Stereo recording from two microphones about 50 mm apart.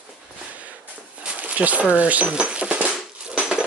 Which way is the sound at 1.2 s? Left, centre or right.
Right.